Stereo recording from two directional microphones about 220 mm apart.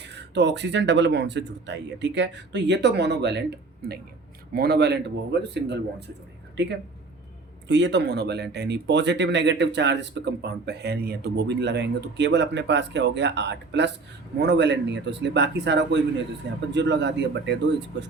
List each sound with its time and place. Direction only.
0.0 s speech: 50° right (ahead or behind)